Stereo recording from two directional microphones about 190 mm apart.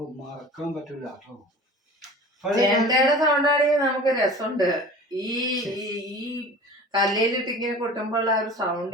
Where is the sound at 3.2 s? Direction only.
20° right (ahead or behind).